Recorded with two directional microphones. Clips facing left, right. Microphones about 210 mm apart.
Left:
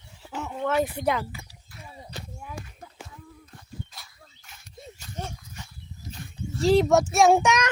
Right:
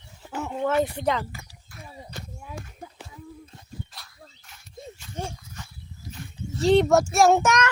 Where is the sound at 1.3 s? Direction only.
50° right (ahead or behind).